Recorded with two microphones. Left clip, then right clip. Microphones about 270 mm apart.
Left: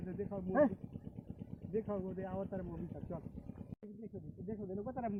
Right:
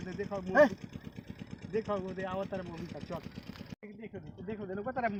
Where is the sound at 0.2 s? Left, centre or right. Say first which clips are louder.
Right 7 dB; centre.